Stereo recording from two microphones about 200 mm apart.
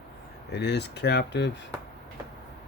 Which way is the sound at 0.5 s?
55° left (ahead or behind).